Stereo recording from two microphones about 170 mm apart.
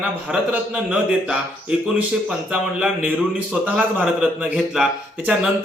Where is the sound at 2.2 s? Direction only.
5° right (ahead or behind).